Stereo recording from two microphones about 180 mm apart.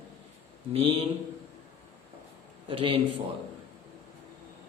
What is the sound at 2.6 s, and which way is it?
Speech, 30° right (ahead or behind).